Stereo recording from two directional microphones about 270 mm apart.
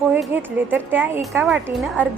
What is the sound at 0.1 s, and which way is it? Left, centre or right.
A woman's voice, centre.